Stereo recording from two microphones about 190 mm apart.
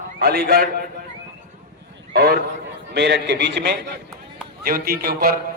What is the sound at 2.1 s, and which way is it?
A man's voice, 55° right (ahead or behind).